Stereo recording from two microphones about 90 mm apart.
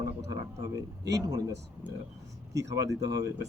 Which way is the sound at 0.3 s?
40° right (ahead or behind).